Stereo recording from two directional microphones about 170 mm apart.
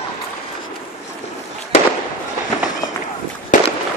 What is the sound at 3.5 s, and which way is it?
Fireworks, 50° left (ahead or behind).